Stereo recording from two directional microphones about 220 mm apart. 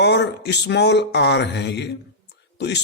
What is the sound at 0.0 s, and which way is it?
A man's voice, 50° left (ahead or behind).